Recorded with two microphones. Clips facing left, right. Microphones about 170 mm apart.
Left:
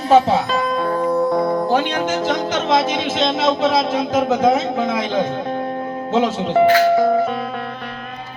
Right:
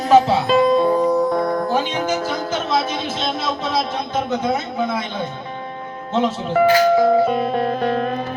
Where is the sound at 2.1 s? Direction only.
90° left.